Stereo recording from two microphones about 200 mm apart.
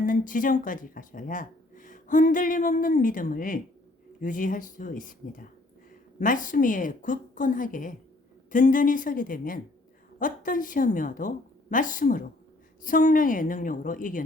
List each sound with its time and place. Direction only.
0.0 s a woman's voice: 40° left (ahead or behind)
6.1 s a woman's voice: 40° left (ahead or behind)